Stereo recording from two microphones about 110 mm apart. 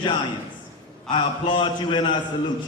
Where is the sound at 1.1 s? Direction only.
45° left (ahead or behind).